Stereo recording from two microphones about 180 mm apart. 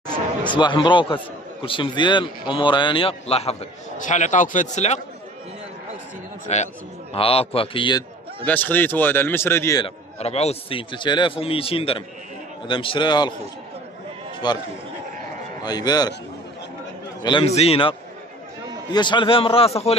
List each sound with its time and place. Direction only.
0.6 s a man's voice: 25° left (ahead or behind)
6.5 s a man's voice: 40° left (ahead or behind)
8.5 s speech: 10° left (ahead or behind)
9.8 s a man's voice: 35° left (ahead or behind)
14.4 s a man's voice: 25° left (ahead or behind)
15.6 s a man's voice: 20° left (ahead or behind)
17.2 s a man's voice: 25° left (ahead or behind)